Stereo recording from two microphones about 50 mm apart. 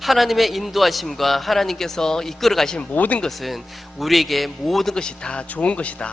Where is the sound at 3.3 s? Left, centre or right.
Centre.